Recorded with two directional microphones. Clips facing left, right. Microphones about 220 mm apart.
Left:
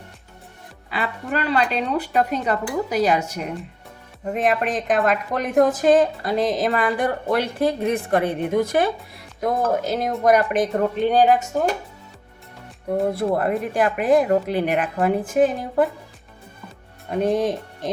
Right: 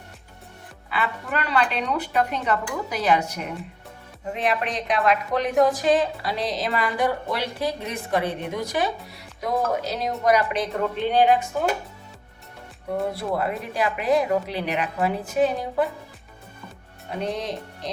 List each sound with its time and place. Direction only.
0.9 s speech: 35° left (ahead or behind)
4.3 s a woman's voice: 45° left (ahead or behind)
13.1 s a woman's voice: 50° left (ahead or behind)
17.2 s a woman's voice: 50° left (ahead or behind)